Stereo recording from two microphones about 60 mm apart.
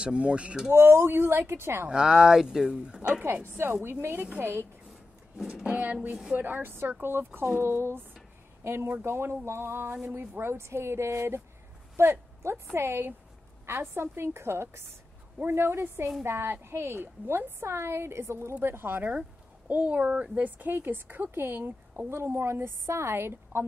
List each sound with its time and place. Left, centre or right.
0.0 s speech: centre
0.7 s a woman's voice: right
1.9 s speech: centre
3.8 s speech: right
5.5 s a woman's voice: centre; by 19.1 s right
19.7 s speech: right